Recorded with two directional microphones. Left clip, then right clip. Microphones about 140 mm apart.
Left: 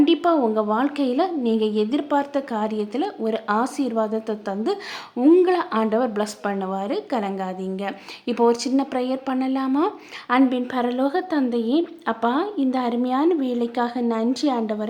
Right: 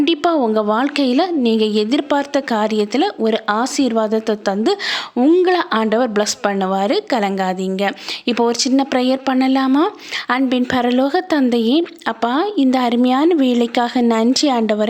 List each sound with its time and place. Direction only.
0.0 s a woman's voice: 35° right (ahead or behind)